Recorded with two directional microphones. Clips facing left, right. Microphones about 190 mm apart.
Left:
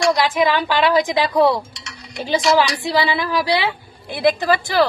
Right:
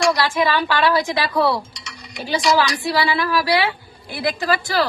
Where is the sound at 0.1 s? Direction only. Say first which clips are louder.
Left 2 dB; 15° left (ahead or behind).